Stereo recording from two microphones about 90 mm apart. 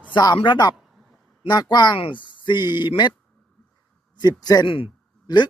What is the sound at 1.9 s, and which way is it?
Speech, 75° left (ahead or behind).